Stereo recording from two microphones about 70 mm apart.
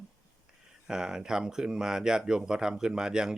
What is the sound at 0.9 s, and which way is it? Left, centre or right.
Speech, centre.